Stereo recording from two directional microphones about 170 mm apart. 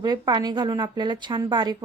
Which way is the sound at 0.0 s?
25° right (ahead or behind).